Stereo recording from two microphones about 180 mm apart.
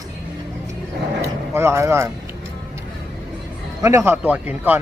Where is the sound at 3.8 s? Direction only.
15° right (ahead or behind).